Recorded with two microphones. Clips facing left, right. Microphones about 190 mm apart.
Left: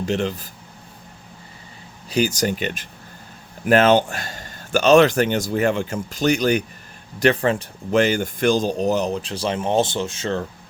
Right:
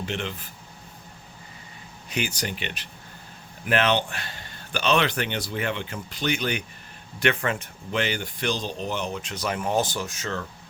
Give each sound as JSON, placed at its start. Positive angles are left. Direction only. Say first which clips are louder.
{"t": 0.0, "sound": "speech", "louder": "left 8 dB", "side_deg": 40}
{"t": 2.0, "sound": "speech", "louder": "left 9 dB", "side_deg": 35}